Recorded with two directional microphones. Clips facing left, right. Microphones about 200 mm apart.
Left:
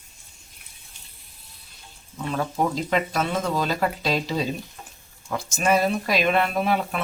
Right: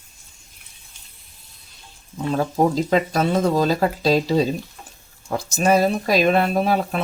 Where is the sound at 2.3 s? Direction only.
35° right (ahead or behind).